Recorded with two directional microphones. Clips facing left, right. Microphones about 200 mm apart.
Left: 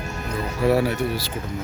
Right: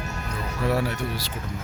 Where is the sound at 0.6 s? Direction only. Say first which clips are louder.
Left 6 dB; 5° left (ahead or behind).